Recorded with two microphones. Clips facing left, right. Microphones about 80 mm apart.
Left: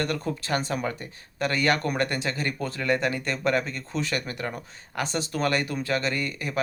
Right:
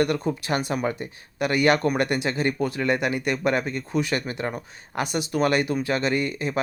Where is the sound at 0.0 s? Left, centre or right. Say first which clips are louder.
Right 5 dB; centre.